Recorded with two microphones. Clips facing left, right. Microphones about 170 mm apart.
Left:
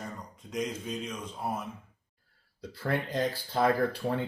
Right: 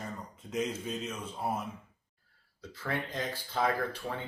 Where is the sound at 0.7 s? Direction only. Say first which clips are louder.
Left 1 dB; 5° right (ahead or behind).